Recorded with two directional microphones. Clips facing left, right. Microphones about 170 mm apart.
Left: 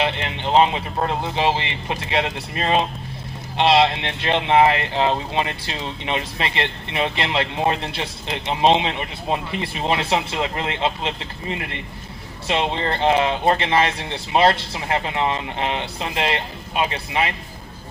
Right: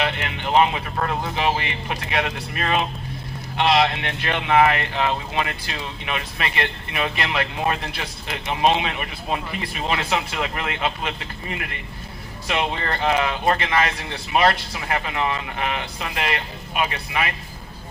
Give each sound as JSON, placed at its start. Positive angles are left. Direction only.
{"t": 0.0, "sound": "speech", "side_deg": 25}